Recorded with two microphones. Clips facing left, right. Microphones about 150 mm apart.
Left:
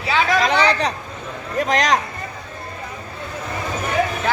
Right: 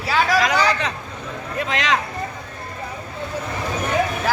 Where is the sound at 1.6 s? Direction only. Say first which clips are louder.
Left 4 dB; 40° left (ahead or behind).